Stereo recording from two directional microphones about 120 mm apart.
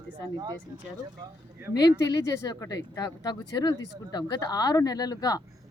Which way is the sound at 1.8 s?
30° left (ahead or behind).